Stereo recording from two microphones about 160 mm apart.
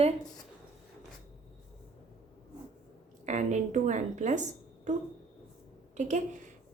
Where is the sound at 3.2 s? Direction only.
50° right (ahead or behind).